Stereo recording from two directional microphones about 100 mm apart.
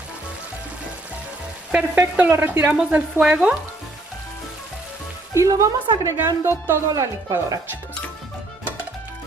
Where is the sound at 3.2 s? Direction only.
10° right (ahead or behind).